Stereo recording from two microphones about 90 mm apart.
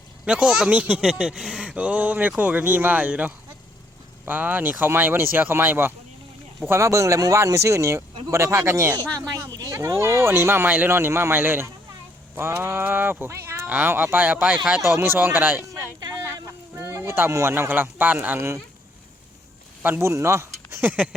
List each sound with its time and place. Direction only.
0.3 s speech: 10° right (ahead or behind); by 18.6 s 30° right (ahead or behind)
19.8 s speech: 25° right (ahead or behind)